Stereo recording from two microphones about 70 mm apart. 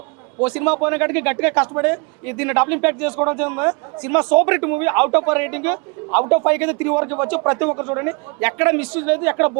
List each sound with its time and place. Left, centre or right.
0.3 s speech: right